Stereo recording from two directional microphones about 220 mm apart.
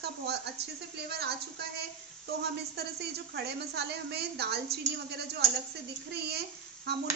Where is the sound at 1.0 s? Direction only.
45° right (ahead or behind).